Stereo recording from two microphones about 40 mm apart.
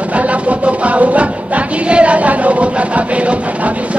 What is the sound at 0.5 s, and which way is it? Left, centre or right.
Music, right.